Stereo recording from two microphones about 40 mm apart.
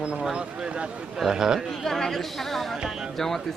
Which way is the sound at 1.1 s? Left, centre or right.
Centre.